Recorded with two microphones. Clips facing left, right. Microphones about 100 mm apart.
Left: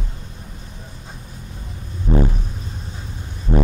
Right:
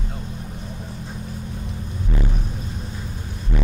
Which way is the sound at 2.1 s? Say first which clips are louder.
Left 10 dB; 30° left (ahead or behind).